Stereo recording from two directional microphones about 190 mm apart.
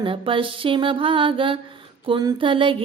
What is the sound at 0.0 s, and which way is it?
Mantra, 25° right (ahead or behind).